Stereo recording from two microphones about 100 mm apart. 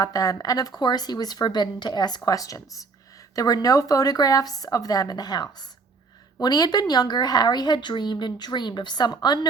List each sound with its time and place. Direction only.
0.0 s speech: 40° left (ahead or behind)